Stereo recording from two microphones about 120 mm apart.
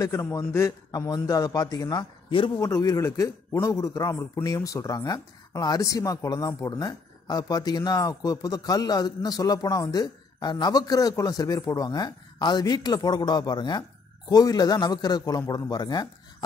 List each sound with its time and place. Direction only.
0.0 s a man's voice: 25° left (ahead or behind); by 2.5 s 45° left (ahead or behind)
2.5 s a man's voice: 30° left (ahead or behind)